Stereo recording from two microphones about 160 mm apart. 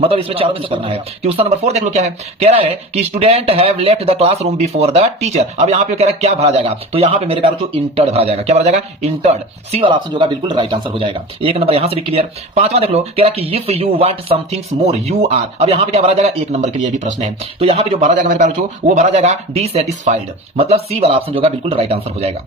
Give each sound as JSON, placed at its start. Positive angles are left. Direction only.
{"t": 0.0, "sound": "speech", "side_deg": -35}
{"t": 9.7, "sound": "speech", "side_deg": -30}